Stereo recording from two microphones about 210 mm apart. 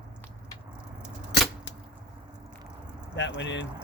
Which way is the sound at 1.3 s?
50° left (ahead or behind).